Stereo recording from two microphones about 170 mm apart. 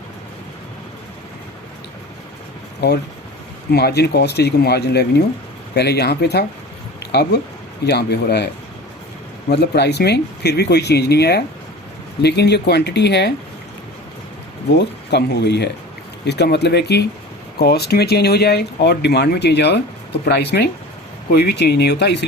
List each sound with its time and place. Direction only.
3.7 s speech: 70° left (ahead or behind)
9.5 s speech: 75° left (ahead or behind)
14.8 s speech: 85° left